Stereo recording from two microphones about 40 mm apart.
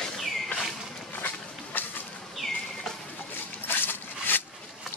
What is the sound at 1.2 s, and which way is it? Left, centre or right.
Walk, left.